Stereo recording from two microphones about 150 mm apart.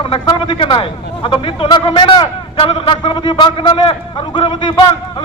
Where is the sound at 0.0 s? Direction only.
35° left (ahead or behind).